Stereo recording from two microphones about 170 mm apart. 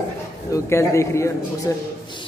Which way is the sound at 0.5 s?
15° left (ahead or behind).